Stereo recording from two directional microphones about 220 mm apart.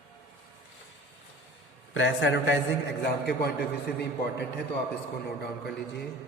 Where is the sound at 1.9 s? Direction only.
60° left (ahead or behind).